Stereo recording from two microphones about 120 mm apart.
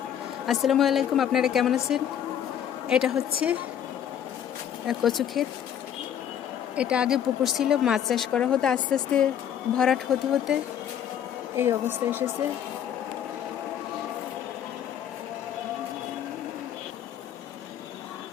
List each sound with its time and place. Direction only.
0.4 s a woman's voice: centre (ahead or behind)
4.9 s speech: centre (ahead or behind)
6.7 s speech: 10° right (ahead or behind)
10.5 s a woman's voice: 5° right (ahead or behind)
11.5 s speech: 20° right (ahead or behind)